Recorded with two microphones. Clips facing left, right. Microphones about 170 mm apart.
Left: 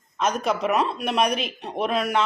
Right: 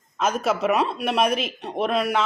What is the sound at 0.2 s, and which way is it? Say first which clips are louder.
Speech: right 1 dB; 5° right (ahead or behind).